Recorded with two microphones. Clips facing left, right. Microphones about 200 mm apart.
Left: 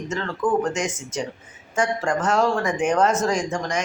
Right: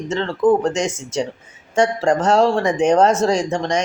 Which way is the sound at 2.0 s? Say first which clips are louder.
Right 6 dB; 40° right (ahead or behind).